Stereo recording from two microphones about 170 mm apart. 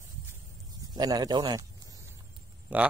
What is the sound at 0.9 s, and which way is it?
Speech, 25° right (ahead or behind).